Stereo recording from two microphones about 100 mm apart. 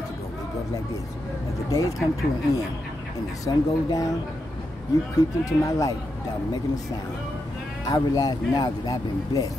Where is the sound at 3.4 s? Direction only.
35° left (ahead or behind).